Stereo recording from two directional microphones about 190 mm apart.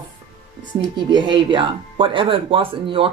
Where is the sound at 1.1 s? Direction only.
25° right (ahead or behind).